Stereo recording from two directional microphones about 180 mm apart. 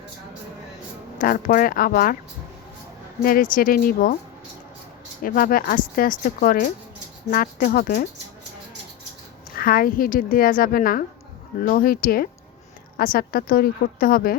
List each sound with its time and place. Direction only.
1.2 s speech: 50° left (ahead or behind)
3.2 s speech: 50° left (ahead or behind)
5.2 s speech: 50° left (ahead or behind)
9.6 s speech: 55° left (ahead or behind)